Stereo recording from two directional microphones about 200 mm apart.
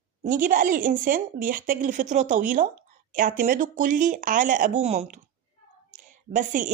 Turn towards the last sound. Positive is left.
turn(degrees=-40)  # may be behind; listen again after turning